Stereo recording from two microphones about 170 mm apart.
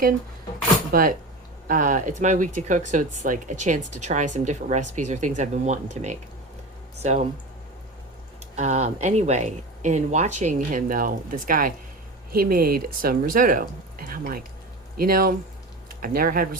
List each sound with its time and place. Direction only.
0.9 s speech: 55° right (ahead or behind); by 7.3 s 40° right (ahead or behind)
8.5 s speech: 40° right (ahead or behind); by 16.6 s 60° right (ahead or behind)